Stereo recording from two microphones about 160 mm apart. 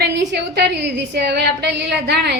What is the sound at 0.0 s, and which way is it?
A woman's voice, 90° right.